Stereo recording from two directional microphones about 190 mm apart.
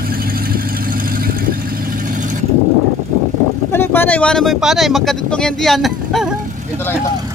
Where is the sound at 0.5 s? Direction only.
50° right (ahead or behind).